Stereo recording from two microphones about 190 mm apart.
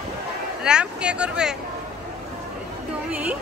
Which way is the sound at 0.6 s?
5° right (ahead or behind).